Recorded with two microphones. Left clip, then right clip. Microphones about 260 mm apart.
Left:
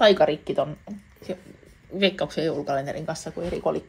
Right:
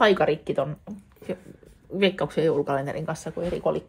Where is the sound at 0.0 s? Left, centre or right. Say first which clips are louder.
Left 2 dB; right.